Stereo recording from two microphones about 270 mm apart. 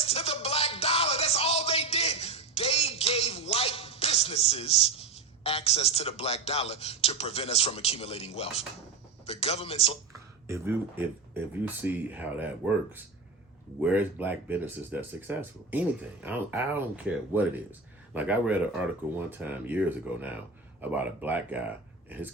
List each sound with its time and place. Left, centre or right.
0.0 s music: left
9.2 s a man's voice: left
10.4 s speech: centre